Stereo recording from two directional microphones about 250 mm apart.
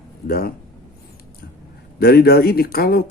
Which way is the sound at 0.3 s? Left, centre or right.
Left.